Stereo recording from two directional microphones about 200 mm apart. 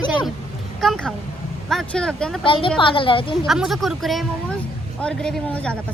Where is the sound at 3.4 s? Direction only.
Centre (ahead or behind).